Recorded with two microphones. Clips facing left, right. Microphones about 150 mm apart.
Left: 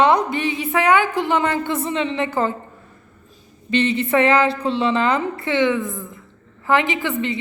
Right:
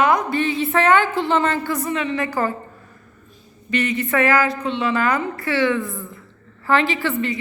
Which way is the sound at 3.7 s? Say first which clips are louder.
Left 3 dB; 30° left (ahead or behind).